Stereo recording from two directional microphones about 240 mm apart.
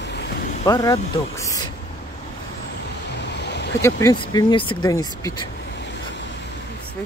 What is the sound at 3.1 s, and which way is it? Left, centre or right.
Vehicle, left.